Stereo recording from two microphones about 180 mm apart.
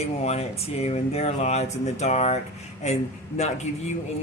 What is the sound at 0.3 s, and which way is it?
Speech, 35° left (ahead or behind).